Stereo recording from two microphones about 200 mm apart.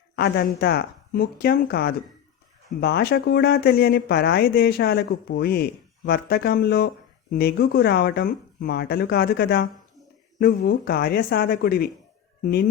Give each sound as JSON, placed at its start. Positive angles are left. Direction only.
{"t": 0.6, "sound": "speech", "side_deg": 50}